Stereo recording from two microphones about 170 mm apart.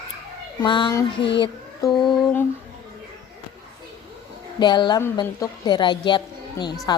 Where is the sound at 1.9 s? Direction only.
10° left (ahead or behind).